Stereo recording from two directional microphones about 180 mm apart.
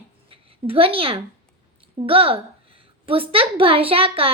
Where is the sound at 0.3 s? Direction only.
30° right (ahead or behind).